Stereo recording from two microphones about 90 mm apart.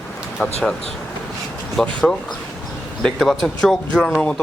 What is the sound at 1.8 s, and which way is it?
Speech, 5° left (ahead or behind).